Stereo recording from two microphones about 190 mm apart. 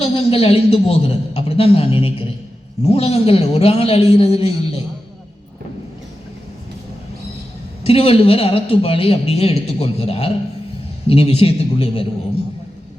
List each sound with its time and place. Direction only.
0.0 s a man's voice: 30° left (ahead or behind)
7.9 s a man's voice: 30° left (ahead or behind)